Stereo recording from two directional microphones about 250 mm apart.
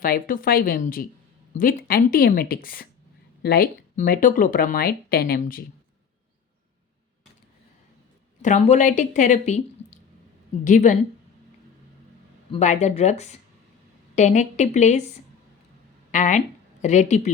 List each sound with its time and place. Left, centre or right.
0.0 s speech: left
8.4 s a woman's voice: left
12.5 s a woman's voice: left